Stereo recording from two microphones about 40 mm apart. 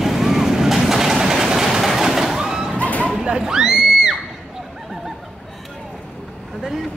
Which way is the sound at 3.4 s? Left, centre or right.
Centre.